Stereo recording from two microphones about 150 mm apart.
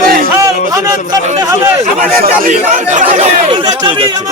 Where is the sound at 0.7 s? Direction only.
20° right (ahead or behind).